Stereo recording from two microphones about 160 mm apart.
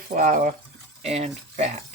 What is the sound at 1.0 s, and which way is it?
Speech, 40° right (ahead or behind).